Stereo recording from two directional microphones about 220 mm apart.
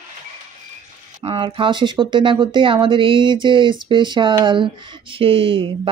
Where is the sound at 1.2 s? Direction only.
20° right (ahead or behind).